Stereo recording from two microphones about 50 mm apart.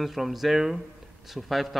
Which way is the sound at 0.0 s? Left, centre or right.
Centre.